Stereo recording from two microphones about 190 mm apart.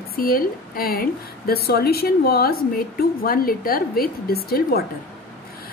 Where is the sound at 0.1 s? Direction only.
50° left (ahead or behind).